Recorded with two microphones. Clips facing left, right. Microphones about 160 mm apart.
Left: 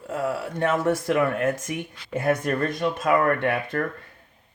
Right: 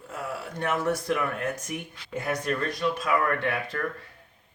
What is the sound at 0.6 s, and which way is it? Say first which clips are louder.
Speech: left 4 dB; 90° left.